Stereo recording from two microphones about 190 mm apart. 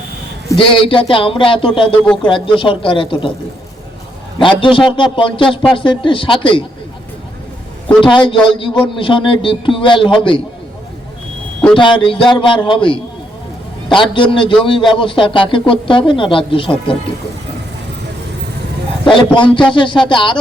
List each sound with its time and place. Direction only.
0.5 s a man's voice: 30° left (ahead or behind)
4.4 s a man's voice: 25° left (ahead or behind)
8.0 s a man's voice: 25° left (ahead or behind)
11.7 s a man's voice: 25° left (ahead or behind)
19.0 s a man's voice: 25° left (ahead or behind)